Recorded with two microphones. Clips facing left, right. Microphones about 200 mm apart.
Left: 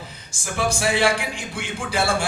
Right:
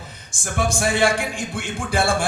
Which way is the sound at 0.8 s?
50° right (ahead or behind).